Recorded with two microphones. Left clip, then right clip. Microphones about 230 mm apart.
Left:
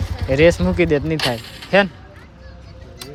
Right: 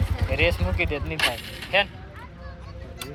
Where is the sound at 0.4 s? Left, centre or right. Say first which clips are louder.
Left 10 dB; left.